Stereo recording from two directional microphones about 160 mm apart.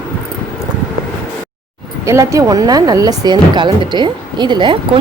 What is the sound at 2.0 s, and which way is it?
Speech, 20° right (ahead or behind).